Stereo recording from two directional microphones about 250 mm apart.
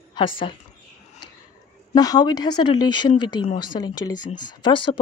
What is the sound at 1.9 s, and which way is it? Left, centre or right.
Speech, centre.